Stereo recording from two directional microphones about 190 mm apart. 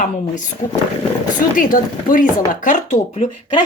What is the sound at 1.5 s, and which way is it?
A woman's voice, 45° left (ahead or behind).